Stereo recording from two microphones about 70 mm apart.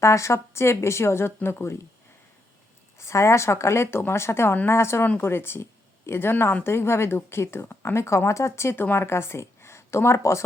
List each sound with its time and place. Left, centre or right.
0.0 s speech: left
3.0 s speech: left
8.0 s speech: left